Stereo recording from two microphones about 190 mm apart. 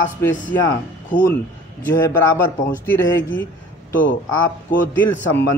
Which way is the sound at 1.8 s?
10° left (ahead or behind).